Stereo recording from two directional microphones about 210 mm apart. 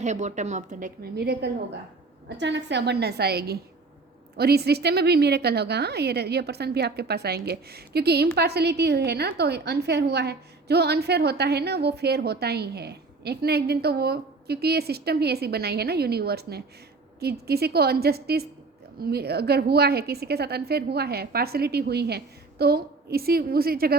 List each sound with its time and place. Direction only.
0.0 s a woman's voice: 35° right (ahead or behind)